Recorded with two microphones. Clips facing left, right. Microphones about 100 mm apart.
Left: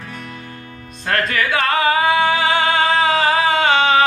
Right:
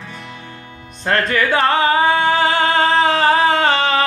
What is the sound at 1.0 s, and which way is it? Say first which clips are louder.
Music: right 2 dB; 30° right (ahead or behind).